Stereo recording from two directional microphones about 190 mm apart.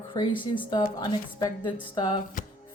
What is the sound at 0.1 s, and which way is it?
Speech, 25° left (ahead or behind).